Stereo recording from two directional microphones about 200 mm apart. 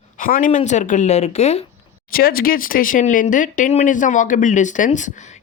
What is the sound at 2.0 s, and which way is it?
Speech, 45° left (ahead or behind).